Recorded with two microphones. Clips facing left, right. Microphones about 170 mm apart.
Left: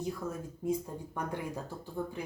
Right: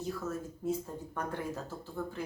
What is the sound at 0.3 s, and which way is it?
Speech, 15° left (ahead or behind).